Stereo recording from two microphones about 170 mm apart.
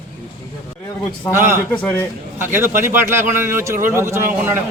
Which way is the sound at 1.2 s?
15° left (ahead or behind).